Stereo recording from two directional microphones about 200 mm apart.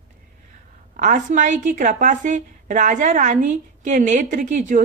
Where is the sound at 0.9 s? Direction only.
40° right (ahead or behind).